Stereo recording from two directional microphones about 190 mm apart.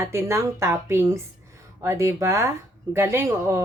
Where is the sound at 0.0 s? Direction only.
15° right (ahead or behind).